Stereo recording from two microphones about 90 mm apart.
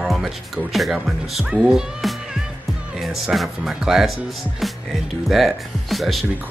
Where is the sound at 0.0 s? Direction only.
5° right (ahead or behind).